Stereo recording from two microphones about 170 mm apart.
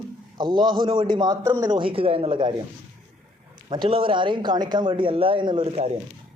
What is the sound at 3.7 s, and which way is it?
Speech, 30° right (ahead or behind).